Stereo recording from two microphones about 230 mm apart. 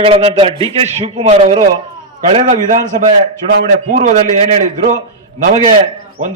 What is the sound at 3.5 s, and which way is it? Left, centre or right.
A man's voice, right.